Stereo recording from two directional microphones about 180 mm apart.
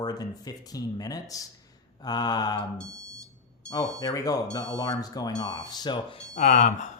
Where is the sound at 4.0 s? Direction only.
20° left (ahead or behind).